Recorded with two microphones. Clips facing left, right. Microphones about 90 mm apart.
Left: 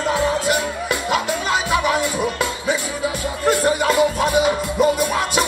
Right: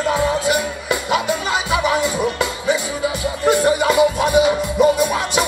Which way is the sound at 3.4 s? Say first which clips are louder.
Right 2 dB; 15° right (ahead or behind).